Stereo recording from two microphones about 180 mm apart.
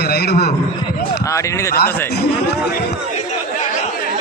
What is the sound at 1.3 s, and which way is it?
Speech, 15° left (ahead or behind).